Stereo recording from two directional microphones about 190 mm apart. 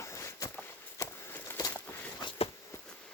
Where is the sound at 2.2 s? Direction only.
30° left (ahead or behind).